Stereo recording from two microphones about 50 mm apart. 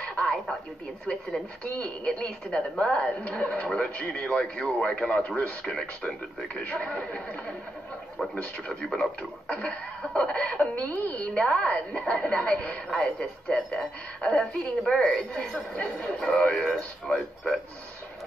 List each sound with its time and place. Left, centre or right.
0.1 s a sound: left
1.0 s a man's voice: left
11.3 s a man's voice: left
12.9 s a woman's voice: centre